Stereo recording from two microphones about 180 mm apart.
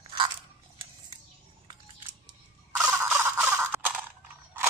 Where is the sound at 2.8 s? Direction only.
10° right (ahead or behind).